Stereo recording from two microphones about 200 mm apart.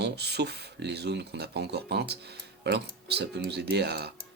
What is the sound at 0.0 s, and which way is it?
Speech, 55° right (ahead or behind).